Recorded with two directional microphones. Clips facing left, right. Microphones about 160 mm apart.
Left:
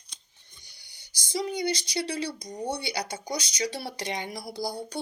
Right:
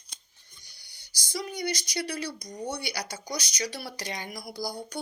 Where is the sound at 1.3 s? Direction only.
25° left (ahead or behind).